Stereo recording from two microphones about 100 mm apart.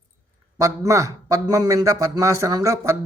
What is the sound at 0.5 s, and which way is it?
A man's voice, 30° right (ahead or behind).